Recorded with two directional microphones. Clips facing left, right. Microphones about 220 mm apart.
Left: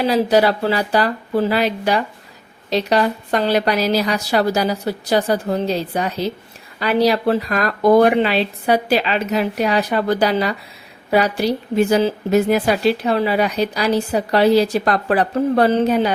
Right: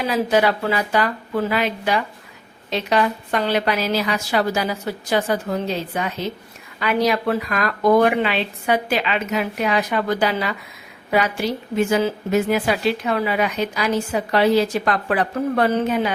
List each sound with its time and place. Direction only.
0.0 s a woman's voice: 35° left (ahead or behind)